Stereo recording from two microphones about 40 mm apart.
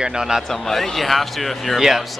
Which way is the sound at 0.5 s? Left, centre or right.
Centre.